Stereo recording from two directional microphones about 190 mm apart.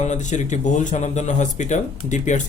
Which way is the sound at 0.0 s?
40° left (ahead or behind).